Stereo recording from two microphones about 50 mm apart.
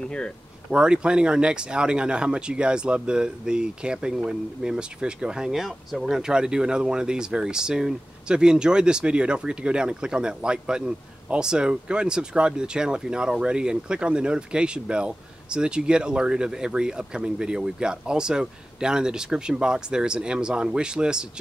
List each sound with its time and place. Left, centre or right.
0.7 s speech: centre